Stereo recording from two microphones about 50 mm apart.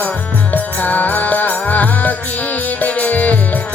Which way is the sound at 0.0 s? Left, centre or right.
Left.